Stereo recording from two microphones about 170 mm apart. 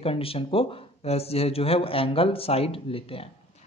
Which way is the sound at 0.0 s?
35° left (ahead or behind).